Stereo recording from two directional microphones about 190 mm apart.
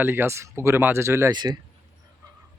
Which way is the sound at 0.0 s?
10° right (ahead or behind).